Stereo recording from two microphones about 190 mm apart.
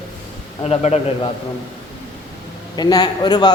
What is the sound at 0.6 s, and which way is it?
Speech, 35° left (ahead or behind).